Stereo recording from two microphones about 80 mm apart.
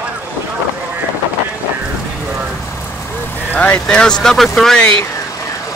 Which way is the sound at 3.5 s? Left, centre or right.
Left.